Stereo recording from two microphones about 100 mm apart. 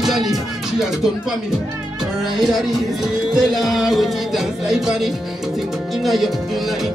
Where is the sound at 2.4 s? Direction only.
Centre (ahead or behind).